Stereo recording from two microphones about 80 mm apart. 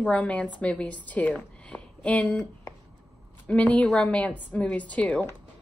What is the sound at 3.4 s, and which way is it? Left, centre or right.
A woman's voice, centre.